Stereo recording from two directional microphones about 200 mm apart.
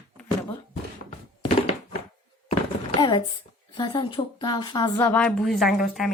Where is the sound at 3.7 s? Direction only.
20° left (ahead or behind).